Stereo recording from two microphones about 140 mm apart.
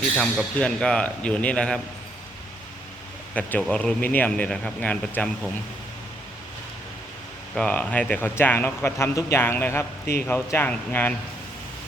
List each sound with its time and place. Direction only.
0.2 s speech: 5° left (ahead or behind)
3.3 s speech: 10° left (ahead or behind)
7.5 s speech: 10° left (ahead or behind)